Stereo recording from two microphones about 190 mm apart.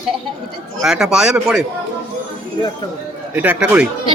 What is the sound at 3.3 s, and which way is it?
Speech, 10° right (ahead or behind).